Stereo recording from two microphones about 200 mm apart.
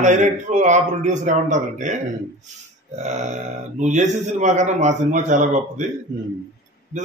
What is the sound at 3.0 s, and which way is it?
Speech, 35° right (ahead or behind).